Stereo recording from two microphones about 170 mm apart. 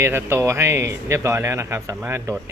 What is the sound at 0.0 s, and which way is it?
Speech, 15° right (ahead or behind).